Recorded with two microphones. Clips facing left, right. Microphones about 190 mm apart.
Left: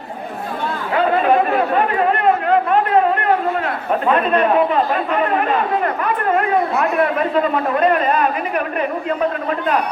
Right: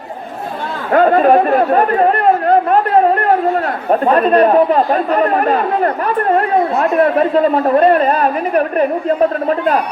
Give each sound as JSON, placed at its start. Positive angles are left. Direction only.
{"t": 0.9, "sound": "chatter", "side_deg": -45}
{"t": 4.0, "sound": "speech", "side_deg": -40}